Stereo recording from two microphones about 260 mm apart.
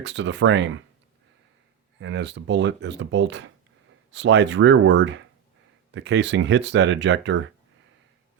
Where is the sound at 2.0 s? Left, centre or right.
Right.